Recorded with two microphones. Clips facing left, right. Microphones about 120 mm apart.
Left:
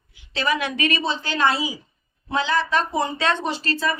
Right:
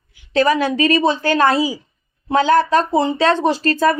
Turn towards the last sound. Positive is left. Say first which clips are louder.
# right 9 dB
turn(degrees=-45)  # may be behind; listen again after turning